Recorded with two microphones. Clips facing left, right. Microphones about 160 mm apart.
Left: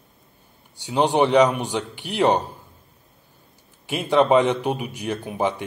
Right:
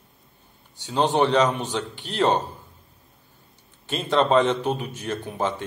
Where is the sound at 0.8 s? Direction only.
15° left (ahead or behind).